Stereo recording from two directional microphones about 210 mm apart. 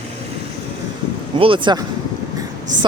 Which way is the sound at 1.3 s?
25° right (ahead or behind).